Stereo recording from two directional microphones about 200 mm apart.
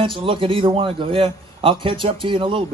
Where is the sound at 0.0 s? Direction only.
25° right (ahead or behind).